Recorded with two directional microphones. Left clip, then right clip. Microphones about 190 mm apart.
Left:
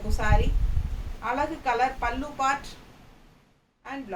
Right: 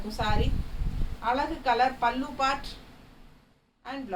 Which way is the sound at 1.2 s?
10° left (ahead or behind).